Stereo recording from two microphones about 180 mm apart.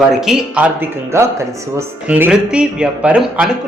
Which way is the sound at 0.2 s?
Centre (ahead or behind).